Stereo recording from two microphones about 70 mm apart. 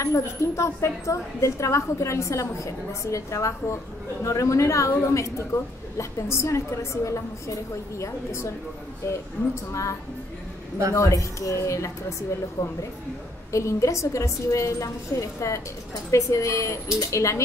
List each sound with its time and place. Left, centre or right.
0.0 s a woman's voice: left
9.7 s a woman's voice: left
11.0 s a woman's voice: left